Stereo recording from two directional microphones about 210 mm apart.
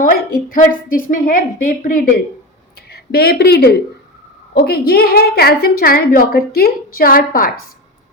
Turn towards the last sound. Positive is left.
turn(degrees=45)  # may be behind; listen again after turning